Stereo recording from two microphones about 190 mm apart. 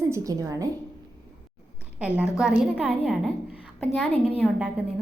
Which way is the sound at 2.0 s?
5° right (ahead or behind).